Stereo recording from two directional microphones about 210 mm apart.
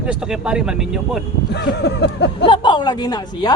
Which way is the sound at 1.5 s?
50° left (ahead or behind).